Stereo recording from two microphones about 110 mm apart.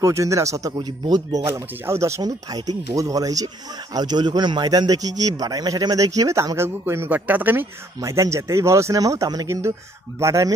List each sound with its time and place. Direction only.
0.0 s a man's voice: 30° right (ahead or behind)
1.4 s a man's voice: 25° right (ahead or behind)
8.0 s speech: 25° right (ahead or behind)